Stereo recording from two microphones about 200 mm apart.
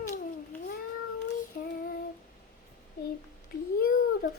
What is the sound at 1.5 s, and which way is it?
Child singing, 45° left (ahead or behind).